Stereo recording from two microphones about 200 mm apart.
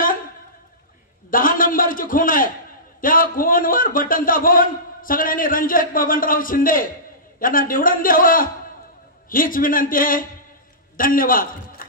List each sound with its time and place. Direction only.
1.3 s a man's voice: 45° left (ahead or behind)